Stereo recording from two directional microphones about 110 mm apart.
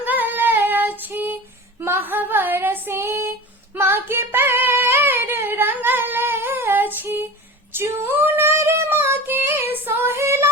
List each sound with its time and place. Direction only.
0.0 s female singing: 15° right (ahead or behind)
3.8 s singing: 20° right (ahead or behind)
7.7 s female singing: 20° right (ahead or behind)